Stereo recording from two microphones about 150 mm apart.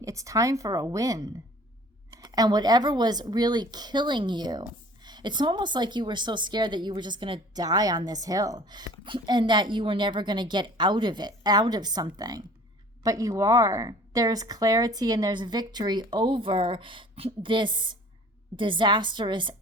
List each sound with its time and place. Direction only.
0.0 s a woman's voice: 20° right (ahead or behind)